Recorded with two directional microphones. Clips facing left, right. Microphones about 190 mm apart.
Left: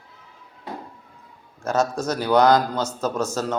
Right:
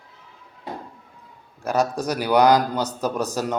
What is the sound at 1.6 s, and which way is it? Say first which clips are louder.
A man's voice: even; 15° right (ahead or behind).